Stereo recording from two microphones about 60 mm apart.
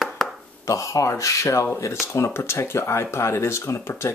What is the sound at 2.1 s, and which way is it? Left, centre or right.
Speech, left.